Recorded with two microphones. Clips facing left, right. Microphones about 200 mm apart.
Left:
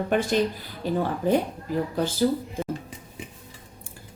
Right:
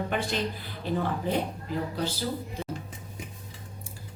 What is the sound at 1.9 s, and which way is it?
Speech, 50° left (ahead or behind).